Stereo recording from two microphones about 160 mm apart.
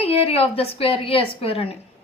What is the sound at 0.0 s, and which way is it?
A woman's voice, 35° left (ahead or behind).